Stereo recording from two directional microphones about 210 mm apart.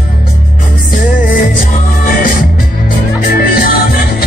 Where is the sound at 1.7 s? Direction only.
40° left (ahead or behind).